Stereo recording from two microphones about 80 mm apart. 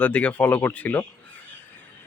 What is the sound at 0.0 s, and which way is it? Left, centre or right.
Speech, centre.